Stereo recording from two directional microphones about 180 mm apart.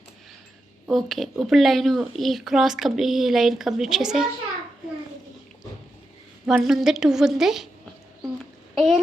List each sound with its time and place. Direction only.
0.9 s speech: centre (ahead or behind)
6.4 s speech: 5° right (ahead or behind)
8.7 s a sound: centre (ahead or behind)